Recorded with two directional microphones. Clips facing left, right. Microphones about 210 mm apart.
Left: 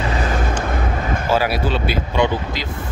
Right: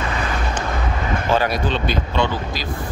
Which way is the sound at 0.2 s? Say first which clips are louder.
Left 3 dB; 45° left (ahead or behind).